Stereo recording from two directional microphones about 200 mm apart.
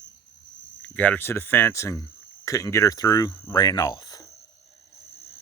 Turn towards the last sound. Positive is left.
turn(degrees=20)  # may be behind; listen again after turning